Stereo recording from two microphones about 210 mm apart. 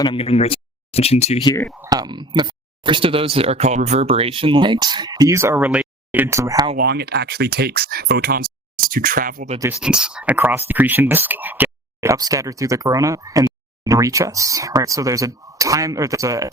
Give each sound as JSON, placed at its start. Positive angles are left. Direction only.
{"t": 0.0, "sound": "speech", "side_deg": 25}
{"t": 1.9, "sound": "speech", "side_deg": -20}
{"t": 6.7, "sound": "speech", "side_deg": -50}
{"t": 9.6, "sound": "speech", "side_deg": -5}